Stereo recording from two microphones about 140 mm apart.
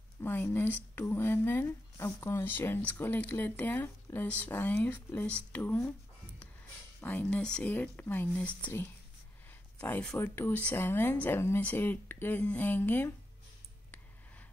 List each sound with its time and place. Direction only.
0.2 s speech: 15° left (ahead or behind)
7.0 s speech: 10° left (ahead or behind)